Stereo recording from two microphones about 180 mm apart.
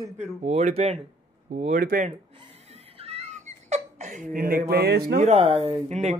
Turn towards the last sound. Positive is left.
turn(degrees=-40)  # may be behind; listen again after turning